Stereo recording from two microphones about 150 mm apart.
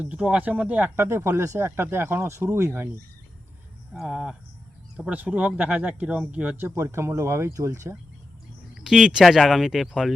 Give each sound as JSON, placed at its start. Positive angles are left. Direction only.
{"t": 0.0, "sound": "speech", "side_deg": -10}
{"t": 3.9, "sound": "speech", "side_deg": -5}
{"t": 8.7, "sound": "speech", "side_deg": -5}